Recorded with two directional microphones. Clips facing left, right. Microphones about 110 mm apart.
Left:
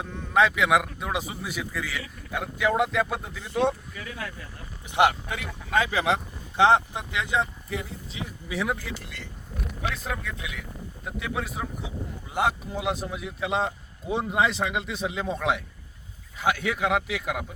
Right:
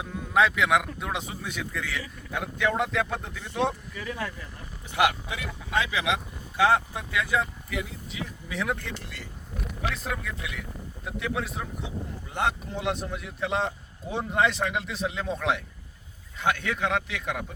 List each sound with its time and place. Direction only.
0.0 s a man's voice: centre (ahead or behind)
5.0 s speech: 25° left (ahead or behind)
5.7 s speech: 45° left (ahead or behind)
6.6 s speech: 25° left (ahead or behind)
8.4 s a man's voice: 5° left (ahead or behind)